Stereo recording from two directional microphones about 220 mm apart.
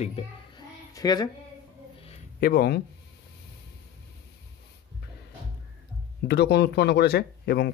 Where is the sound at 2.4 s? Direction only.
45° left (ahead or behind).